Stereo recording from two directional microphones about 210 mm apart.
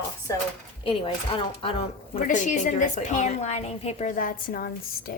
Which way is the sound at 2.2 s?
35° left (ahead or behind).